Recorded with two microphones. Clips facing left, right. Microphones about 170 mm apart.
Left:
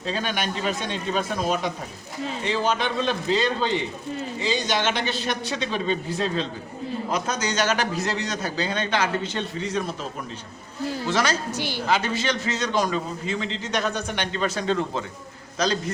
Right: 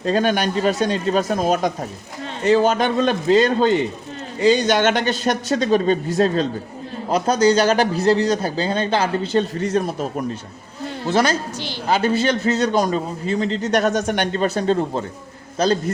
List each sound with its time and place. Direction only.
0.0 s a man's voice: 45° right (ahead or behind)
7.1 s a man's voice: 35° right (ahead or behind)
11.5 s a woman's voice: 10° left (ahead or behind)
11.9 s a man's voice: 50° right (ahead or behind)
12.4 s a man's voice: 35° right (ahead or behind)
14.5 s a man's voice: 40° right (ahead or behind)
15.5 s a man's voice: 50° right (ahead or behind)